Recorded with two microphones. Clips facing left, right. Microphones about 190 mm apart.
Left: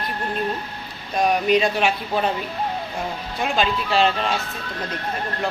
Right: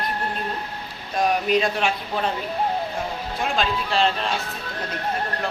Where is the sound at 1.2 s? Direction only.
Centre (ahead or behind).